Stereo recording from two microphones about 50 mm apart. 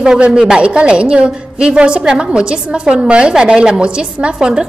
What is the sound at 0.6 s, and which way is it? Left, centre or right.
A woman's voice, right.